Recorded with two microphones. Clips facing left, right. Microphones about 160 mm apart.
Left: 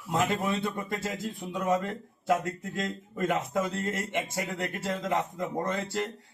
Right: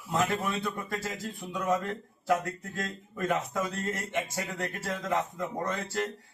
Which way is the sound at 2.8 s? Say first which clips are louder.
Left 3 dB; 20° left (ahead or behind).